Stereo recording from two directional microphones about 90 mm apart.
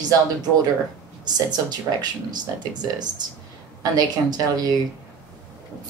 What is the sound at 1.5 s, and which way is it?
Speech, 50° right (ahead or behind).